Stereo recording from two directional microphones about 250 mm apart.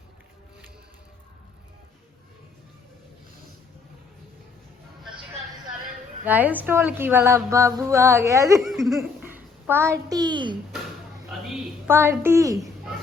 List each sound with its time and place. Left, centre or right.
6.2 s speech: centre
8.6 s speech: centre
9.0 s a sound: centre
10.1 s speech: centre
11.3 s a woman's voice: centre